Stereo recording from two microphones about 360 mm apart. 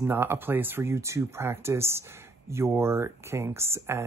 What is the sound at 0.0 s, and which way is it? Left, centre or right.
Speech, centre.